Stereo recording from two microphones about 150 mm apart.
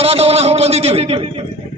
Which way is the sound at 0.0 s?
40° right (ahead or behind).